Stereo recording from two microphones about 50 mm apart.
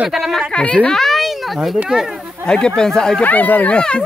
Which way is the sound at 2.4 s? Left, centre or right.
Centre.